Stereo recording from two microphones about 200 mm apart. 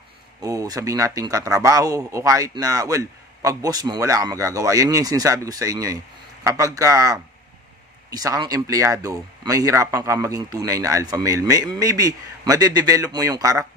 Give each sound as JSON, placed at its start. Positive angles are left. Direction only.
{"t": 0.4, "sound": "a man's voice", "side_deg": -20}